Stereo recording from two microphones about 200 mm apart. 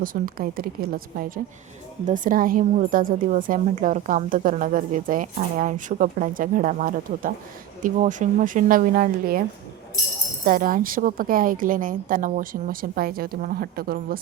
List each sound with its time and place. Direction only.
0.0 s a woman's voice: 45° right (ahead or behind)
10.4 s a woman's voice: 45° right (ahead or behind)